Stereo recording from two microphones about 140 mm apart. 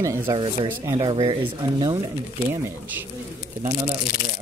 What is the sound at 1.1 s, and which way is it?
Speech, 35° right (ahead or behind).